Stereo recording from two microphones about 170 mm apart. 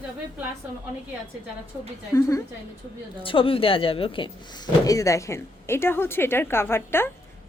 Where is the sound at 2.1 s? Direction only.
20° left (ahead or behind).